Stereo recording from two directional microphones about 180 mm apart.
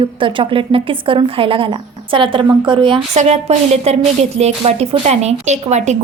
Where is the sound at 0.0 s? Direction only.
30° right (ahead or behind).